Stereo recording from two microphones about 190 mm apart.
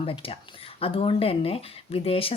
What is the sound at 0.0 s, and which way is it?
Speech, 30° left (ahead or behind).